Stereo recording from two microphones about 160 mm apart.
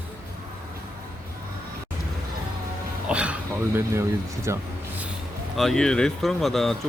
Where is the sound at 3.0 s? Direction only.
5° right (ahead or behind).